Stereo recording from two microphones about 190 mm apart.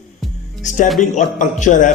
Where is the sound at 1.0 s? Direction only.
40° left (ahead or behind).